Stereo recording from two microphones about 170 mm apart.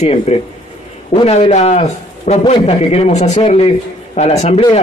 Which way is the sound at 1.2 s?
40° left (ahead or behind).